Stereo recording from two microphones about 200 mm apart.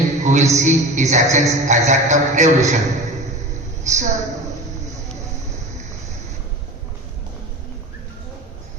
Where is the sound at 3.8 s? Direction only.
35° right (ahead or behind).